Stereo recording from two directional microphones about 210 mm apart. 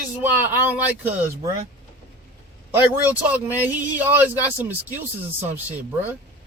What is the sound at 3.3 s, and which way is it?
Speech, 10° right (ahead or behind).